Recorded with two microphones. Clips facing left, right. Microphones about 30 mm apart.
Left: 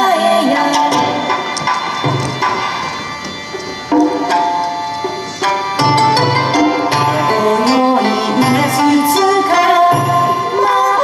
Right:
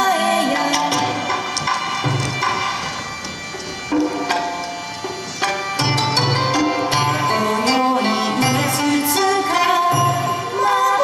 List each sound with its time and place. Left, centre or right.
0.0 s music: left
3.9 s tabla: left
5.9 s music: left
7.5 s music: left
8.4 s music: left
9.2 s music: centre
9.8 s music: left
10.2 s music: left